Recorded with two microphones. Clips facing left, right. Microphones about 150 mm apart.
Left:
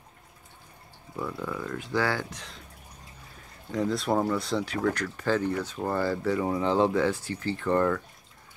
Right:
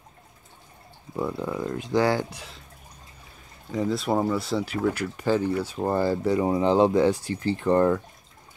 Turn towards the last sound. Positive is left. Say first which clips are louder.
# right 4 dB
turn(degrees=-20)  # may be behind; listen again after turning